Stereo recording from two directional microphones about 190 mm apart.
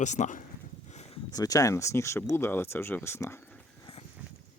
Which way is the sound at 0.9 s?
35° left (ahead or behind).